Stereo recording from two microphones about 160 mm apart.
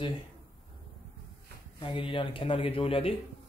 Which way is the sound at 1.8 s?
30° left (ahead or behind).